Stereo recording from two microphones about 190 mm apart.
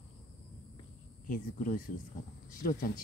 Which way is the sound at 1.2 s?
45° left (ahead or behind).